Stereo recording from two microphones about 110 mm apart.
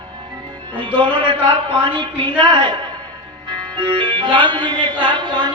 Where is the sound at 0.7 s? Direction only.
50° right (ahead or behind).